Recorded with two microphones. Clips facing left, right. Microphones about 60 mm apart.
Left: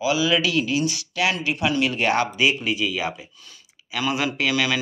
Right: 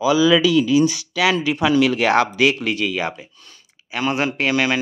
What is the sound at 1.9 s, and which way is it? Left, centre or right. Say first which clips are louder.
Speech: right 5 dB; right.